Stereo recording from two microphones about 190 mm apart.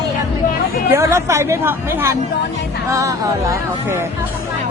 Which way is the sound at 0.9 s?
15° right (ahead or behind).